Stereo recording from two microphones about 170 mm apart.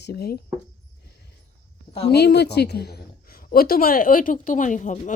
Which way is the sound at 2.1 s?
70° left (ahead or behind).